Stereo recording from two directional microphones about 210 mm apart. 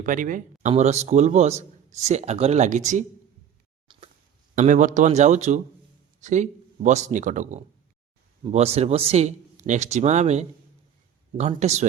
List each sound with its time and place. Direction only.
0.0 s speech: 40° right (ahead or behind)
3.9 s a sound: 25° right (ahead or behind)
4.5 s speech: 35° right (ahead or behind)